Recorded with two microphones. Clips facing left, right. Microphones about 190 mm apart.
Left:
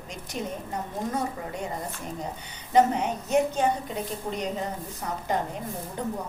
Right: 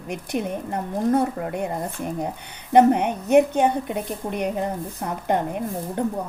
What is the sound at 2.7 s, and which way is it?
A woman's voice, 60° right (ahead or behind).